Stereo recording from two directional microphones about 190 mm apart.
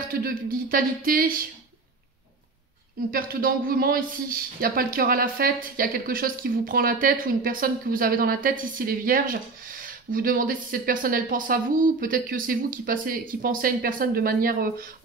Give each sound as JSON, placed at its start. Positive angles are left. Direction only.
{"t": 0.1, "sound": "speech", "side_deg": -50}
{"t": 3.1, "sound": "speech", "side_deg": -50}